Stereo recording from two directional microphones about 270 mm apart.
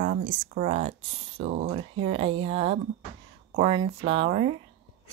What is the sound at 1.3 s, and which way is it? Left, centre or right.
Speech, right.